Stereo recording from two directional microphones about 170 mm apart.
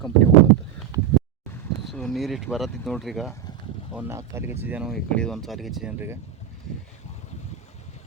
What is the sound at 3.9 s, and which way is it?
Speech, 15° right (ahead or behind).